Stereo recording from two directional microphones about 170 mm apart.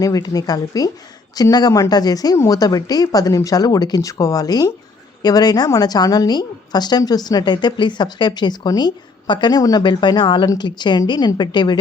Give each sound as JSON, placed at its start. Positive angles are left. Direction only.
{"t": 0.0, "sound": "a woman's voice", "side_deg": 20}